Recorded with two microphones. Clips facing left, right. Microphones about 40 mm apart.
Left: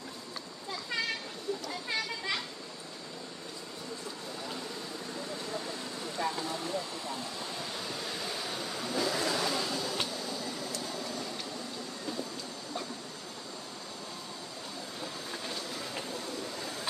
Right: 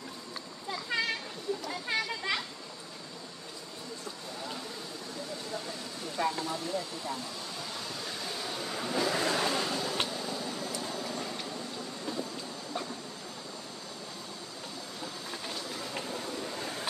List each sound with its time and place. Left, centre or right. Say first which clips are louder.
0.9 s a sound: right 3 dB; right
1.9 s children playing: right 3 dB; right
6.2 s a sound: right 3 dB; right
8.1 s vehicle: even; centre
8.9 s vehicle: right 2 dB; right
9.2 s vehicle: right 2 dB; right
15.3 s train: even; centre